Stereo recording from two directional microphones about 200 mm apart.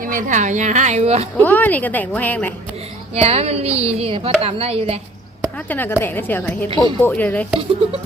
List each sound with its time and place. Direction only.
0.0 s speech: 40° right (ahead or behind)
1.4 s a woman's voice: 10° left (ahead or behind)
3.2 s speech: 30° right (ahead or behind)
5.6 s a woman's voice: 10° left (ahead or behind)
7.1 s a woman's voice: 5° left (ahead or behind)